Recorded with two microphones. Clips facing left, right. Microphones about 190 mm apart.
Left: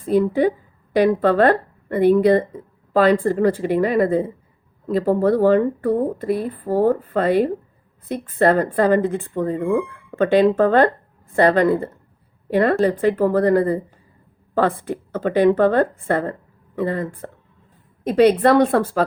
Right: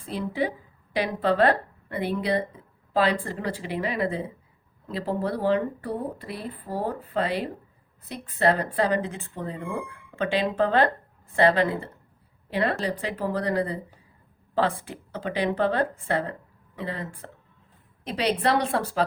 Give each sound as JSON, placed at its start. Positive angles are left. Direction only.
{"t": 0.0, "sound": "a woman's voice", "side_deg": 50}